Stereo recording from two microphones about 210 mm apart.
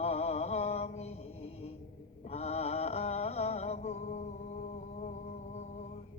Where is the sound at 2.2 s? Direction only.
30° left (ahead or behind).